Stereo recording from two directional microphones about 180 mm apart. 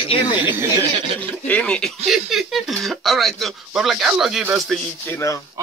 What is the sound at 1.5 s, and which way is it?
Speech, 5° left (ahead or behind).